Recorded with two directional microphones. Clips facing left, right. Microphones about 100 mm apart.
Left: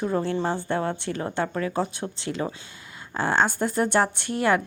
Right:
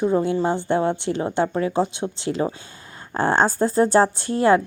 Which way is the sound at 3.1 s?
40° right (ahead or behind).